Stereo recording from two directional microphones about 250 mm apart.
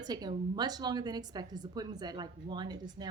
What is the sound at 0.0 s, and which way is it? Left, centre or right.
A woman's voice, centre.